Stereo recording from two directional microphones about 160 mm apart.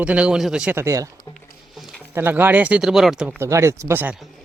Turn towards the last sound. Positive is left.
turn(degrees=-15)  # may be behind; listen again after turning